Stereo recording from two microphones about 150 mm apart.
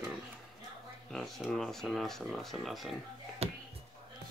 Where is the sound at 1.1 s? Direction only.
5° left (ahead or behind).